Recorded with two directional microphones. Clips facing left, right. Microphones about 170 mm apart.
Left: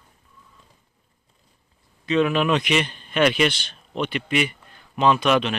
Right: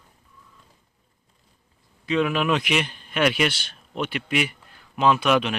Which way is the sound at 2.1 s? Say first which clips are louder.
Left 2 dB; 5° right (ahead or behind).